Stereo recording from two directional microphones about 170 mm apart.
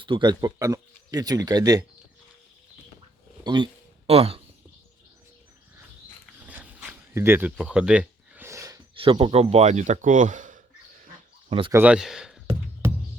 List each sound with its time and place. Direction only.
0.0 s speech: 30° right (ahead or behind)
3.4 s a sound: 25° right (ahead or behind)
6.4 s dog: 10° right (ahead or behind)
7.1 s speech: 15° right (ahead or behind)
7.5 s a sound: 5° right (ahead or behind)
9.0 s speech: 35° right (ahead or behind); by 10.6 s 50° right (ahead or behind)
11.4 s speech: 30° right (ahead or behind)
11.7 s speech: 10° right (ahead or behind)